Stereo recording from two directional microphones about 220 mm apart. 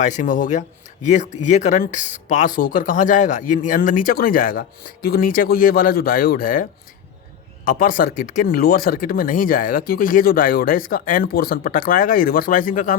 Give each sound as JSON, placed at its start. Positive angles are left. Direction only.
{"t": 0.0, "sound": "speech", "side_deg": 35}